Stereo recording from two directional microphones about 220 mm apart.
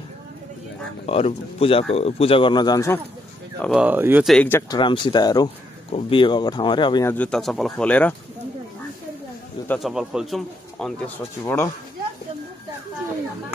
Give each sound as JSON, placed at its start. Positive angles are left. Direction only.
{"t": 1.0, "sound": "speech", "side_deg": 25}
{"t": 3.5, "sound": "speech", "side_deg": 5}
{"t": 3.8, "sound": "speech", "side_deg": -10}
{"t": 9.7, "sound": "speech", "side_deg": 0}
{"t": 11.4, "sound": "speech", "side_deg": 10}